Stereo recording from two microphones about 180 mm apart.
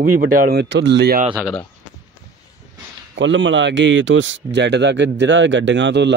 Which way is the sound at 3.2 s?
90° right.